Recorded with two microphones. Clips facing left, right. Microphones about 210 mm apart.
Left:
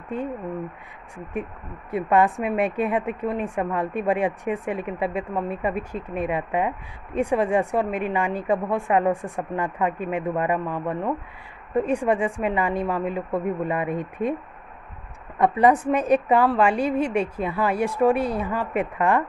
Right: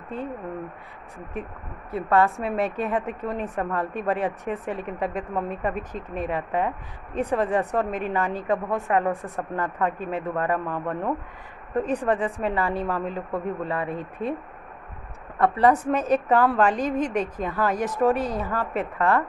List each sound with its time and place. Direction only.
1.9 s a woman's voice: 15° left (ahead or behind)
15.3 s a woman's voice: 15° left (ahead or behind)